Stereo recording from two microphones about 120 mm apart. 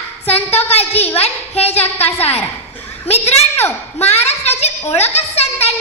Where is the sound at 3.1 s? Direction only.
60° left (ahead or behind).